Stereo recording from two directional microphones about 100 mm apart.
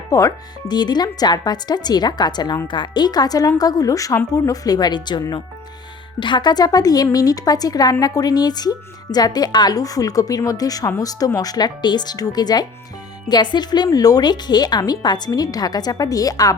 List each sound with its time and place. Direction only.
0.1 s speech: 35° left (ahead or behind)